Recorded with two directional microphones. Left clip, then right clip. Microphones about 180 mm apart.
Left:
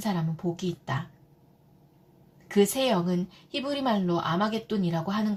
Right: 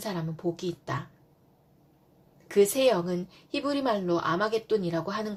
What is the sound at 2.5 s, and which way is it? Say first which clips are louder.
Speech: right 2 dB; 40° right (ahead or behind).